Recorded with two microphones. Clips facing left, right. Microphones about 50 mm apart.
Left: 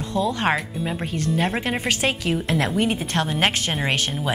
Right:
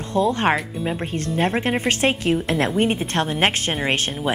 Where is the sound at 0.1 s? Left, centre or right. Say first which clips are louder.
Right 3 dB; right.